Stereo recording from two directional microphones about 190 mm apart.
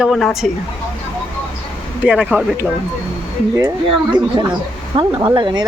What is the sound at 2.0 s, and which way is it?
Speech, 10° right (ahead or behind).